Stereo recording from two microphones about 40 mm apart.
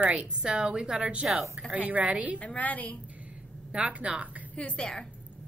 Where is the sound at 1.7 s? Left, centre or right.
Right.